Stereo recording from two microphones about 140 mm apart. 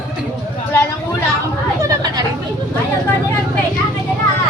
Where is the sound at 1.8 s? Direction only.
30° right (ahead or behind).